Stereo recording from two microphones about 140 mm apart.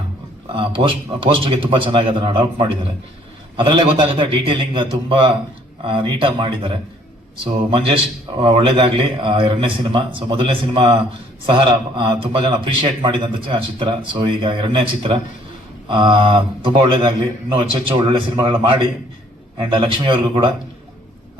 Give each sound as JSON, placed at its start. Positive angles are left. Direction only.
{"t": 0.4, "sound": "a man's voice", "side_deg": -35}
{"t": 8.4, "sound": "a man's voice", "side_deg": -35}